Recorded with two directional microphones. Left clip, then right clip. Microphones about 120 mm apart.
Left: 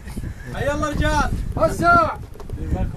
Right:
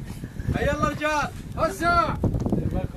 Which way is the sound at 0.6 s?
Centre (ahead or behind).